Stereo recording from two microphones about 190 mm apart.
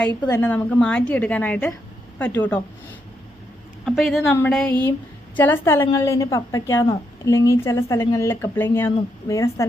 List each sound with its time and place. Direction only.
0.3 s a woman's voice: 10° left (ahead or behind)
3.8 s a woman's voice: centre (ahead or behind); by 9.6 s 15° left (ahead or behind)